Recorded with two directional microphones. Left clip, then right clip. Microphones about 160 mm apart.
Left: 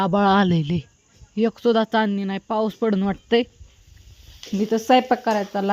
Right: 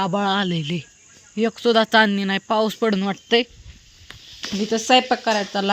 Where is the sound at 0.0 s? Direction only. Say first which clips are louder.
Left 3 dB; 40° left (ahead or behind).